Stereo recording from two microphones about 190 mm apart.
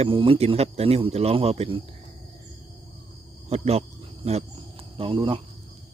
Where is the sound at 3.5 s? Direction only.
35° right (ahead or behind).